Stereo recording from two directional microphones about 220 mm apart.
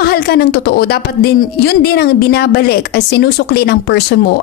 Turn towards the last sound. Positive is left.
turn(degrees=50)  # may be behind; listen again after turning